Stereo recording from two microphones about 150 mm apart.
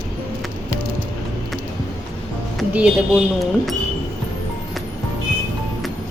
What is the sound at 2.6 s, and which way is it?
Music, 10° right (ahead or behind).